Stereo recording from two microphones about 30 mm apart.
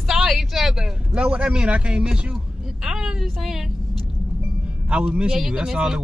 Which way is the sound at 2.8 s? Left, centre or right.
Centre.